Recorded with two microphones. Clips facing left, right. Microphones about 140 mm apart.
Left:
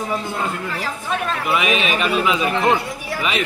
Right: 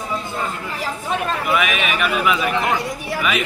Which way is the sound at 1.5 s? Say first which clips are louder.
Left 3 dB; 30° left (ahead or behind).